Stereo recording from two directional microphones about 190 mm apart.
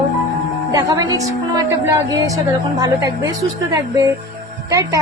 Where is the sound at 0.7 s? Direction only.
20° right (ahead or behind).